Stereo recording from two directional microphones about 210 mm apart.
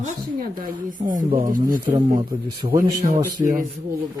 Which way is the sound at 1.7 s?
15° right (ahead or behind).